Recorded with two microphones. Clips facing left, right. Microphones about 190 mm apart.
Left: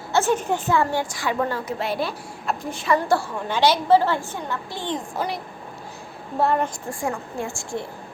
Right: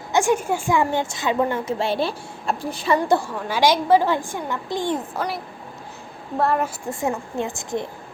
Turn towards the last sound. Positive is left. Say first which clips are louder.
# right 3 dB
turn(degrees=-20)  # may be behind; listen again after turning